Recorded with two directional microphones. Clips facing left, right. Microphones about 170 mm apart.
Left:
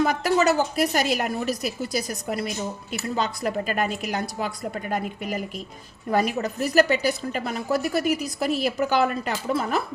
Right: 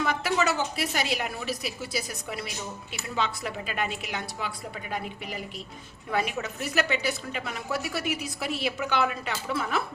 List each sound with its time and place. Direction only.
0.0 s a woman's voice: 40° left (ahead or behind)